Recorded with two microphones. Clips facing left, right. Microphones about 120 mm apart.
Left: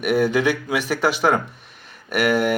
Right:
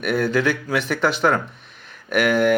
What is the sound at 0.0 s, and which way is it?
Speech, 10° left (ahead or behind).